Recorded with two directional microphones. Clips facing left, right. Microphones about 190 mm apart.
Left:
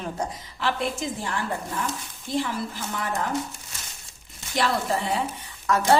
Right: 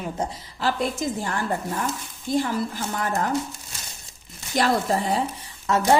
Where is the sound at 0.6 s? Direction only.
40° right (ahead or behind).